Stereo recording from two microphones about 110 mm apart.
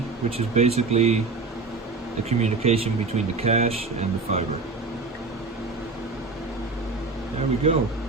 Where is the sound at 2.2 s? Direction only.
70° right (ahead or behind).